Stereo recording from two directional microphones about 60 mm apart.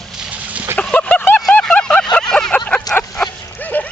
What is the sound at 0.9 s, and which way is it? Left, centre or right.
Vehicle, left.